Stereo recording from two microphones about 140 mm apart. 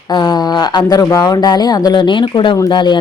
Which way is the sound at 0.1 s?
30° left (ahead or behind).